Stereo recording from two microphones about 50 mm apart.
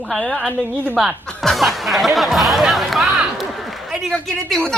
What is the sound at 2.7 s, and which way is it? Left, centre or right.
A man's voice, centre.